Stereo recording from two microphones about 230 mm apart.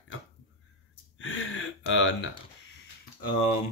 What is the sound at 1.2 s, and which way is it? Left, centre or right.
Speech, left.